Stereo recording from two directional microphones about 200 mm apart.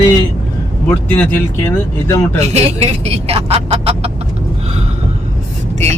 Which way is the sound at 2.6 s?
30° right (ahead or behind).